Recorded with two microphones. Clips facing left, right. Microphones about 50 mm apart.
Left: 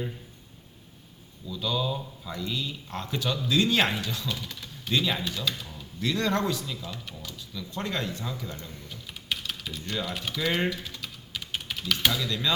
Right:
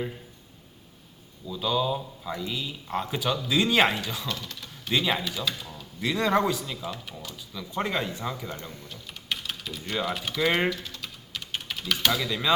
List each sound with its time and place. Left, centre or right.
1.5 s speech: centre
4.3 s speech: centre
4.9 s speech: centre
7.7 s speech: centre
8.4 s speech: right
8.9 s typing: centre
10.1 s speech: centre
11.0 s typing: centre
12.1 s speech: right